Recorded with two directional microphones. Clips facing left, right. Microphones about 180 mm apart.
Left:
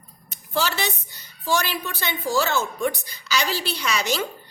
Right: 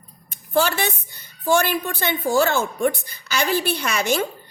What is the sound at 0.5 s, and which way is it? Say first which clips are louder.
A woman's voice: right 5 dB; 55° right (ahead or behind).